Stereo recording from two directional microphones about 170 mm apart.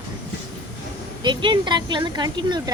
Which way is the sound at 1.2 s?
25° right (ahead or behind).